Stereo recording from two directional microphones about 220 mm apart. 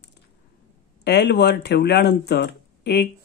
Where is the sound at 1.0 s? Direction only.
50° left (ahead or behind).